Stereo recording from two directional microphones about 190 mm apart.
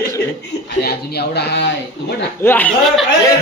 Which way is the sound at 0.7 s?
55° left (ahead or behind).